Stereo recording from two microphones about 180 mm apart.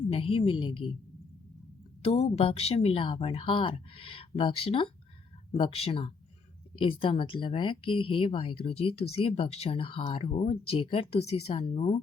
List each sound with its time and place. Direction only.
0.1 s speech: 30° left (ahead or behind)
2.0 s speech: 35° left (ahead or behind)